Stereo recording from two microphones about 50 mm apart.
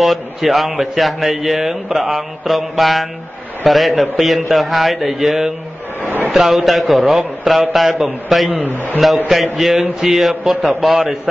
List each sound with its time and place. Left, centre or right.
0.0 s speech: centre
6.0 s a sound: right
6.3 s speech: centre